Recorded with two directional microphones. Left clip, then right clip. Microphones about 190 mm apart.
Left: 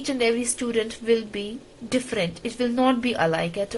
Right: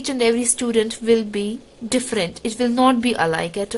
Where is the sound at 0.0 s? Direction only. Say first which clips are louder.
Right 4 dB; 40° right (ahead or behind).